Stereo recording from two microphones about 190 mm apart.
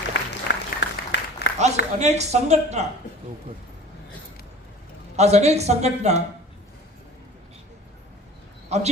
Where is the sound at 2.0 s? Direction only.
35° right (ahead or behind).